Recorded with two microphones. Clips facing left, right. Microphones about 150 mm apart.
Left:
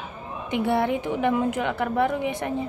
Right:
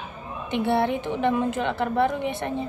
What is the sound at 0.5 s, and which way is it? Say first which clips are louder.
Speech: even; 15° left (ahead or behind).